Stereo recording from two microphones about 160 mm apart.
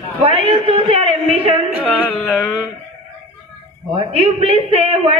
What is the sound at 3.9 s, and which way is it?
A man's voice, 40° right (ahead or behind).